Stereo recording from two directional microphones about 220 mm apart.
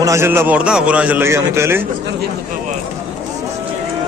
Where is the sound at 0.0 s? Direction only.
10° right (ahead or behind).